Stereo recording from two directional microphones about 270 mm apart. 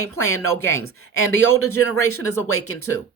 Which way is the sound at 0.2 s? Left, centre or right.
Left.